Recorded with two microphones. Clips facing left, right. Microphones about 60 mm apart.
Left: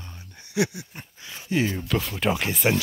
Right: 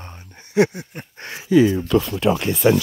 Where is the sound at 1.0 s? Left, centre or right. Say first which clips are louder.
Right 7 dB; right.